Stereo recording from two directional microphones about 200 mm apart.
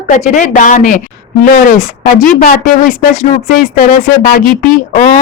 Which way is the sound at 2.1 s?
45° left (ahead or behind).